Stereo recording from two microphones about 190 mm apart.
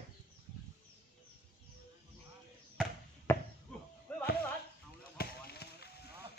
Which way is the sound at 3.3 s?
10° left (ahead or behind).